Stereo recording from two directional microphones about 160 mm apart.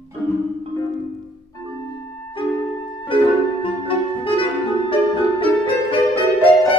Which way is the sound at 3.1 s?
35° left (ahead or behind).